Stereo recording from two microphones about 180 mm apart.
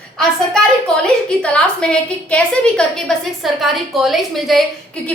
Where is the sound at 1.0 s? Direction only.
5° left (ahead or behind).